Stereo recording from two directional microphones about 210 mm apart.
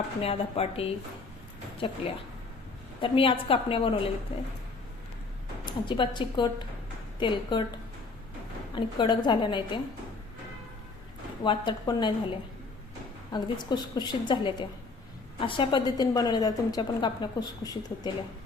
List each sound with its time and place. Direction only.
0.2 s a woman's voice: 30° left (ahead or behind)
3.0 s a woman's voice: 25° left (ahead or behind)
5.6 s a woman's voice: 20° left (ahead or behind)
8.7 s a woman's voice: 20° left (ahead or behind)
11.4 s a woman's voice: 20° left (ahead or behind)
13.3 s a woman's voice: 20° left (ahead or behind)